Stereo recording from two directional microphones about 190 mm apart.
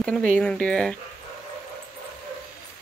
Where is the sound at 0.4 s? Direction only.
5° left (ahead or behind).